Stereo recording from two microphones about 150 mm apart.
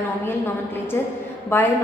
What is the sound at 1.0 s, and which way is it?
Speech, 15° left (ahead or behind).